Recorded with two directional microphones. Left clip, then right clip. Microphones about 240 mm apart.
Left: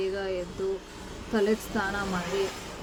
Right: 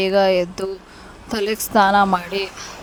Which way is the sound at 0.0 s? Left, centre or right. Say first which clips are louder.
Right 15 dB; right.